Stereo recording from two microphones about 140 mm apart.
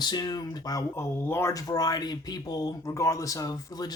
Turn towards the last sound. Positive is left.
turn(degrees=25)  # may be behind; listen again after turning